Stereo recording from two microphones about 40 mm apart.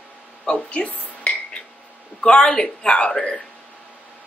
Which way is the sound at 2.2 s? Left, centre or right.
Left.